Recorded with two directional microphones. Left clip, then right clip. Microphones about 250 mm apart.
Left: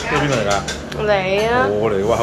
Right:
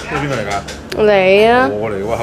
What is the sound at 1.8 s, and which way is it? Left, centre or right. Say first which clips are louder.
Speech: left 2 dB; centre.